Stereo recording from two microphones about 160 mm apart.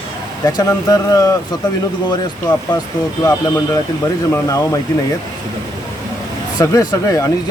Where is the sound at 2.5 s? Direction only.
25° left (ahead or behind).